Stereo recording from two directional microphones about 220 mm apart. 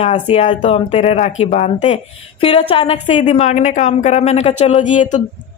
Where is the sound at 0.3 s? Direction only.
30° left (ahead or behind).